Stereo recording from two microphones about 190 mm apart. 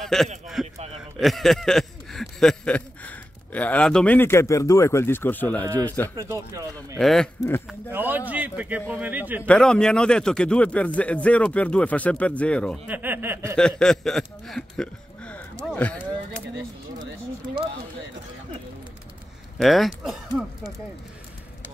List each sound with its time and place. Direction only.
0.0 s speech: centre (ahead or behind)
1.2 s a sound: centre (ahead or behind)
5.9 s speech: 10° left (ahead or behind)
6.1 s a man's voice: 15° right (ahead or behind)
7.0 s speech: centre (ahead or behind)
7.9 s a man's voice: 10° right (ahead or behind)
9.5 s speech: 5° left (ahead or behind)
12.8 s a man's voice: 10° right (ahead or behind)
13.6 s speech: 5° left (ahead or behind)
19.6 s speech: centre (ahead or behind)